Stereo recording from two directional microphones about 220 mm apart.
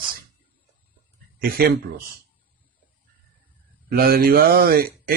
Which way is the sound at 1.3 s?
45° right (ahead or behind).